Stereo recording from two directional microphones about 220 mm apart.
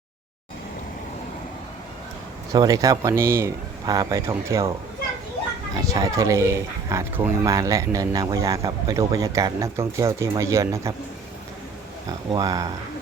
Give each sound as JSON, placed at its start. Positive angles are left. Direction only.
{"t": 2.5, "sound": "speech", "side_deg": -15}
{"t": 5.9, "sound": "speech", "side_deg": -15}
{"t": 12.3, "sound": "speech", "side_deg": -15}